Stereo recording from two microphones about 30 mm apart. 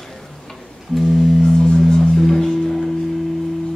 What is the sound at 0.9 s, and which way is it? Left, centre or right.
Music, centre.